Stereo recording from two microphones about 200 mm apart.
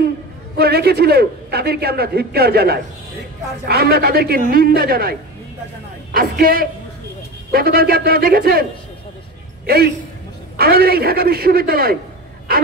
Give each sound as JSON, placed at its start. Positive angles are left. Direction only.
{"t": 0.6, "sound": "a man's voice", "side_deg": -50}
{"t": 6.1, "sound": "a man's voice", "side_deg": -45}
{"t": 9.7, "sound": "a man's voice", "side_deg": -50}